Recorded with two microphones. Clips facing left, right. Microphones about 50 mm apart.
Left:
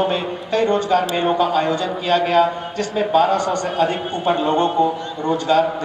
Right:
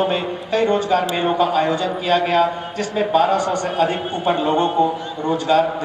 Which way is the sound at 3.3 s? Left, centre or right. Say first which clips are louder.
Even; centre.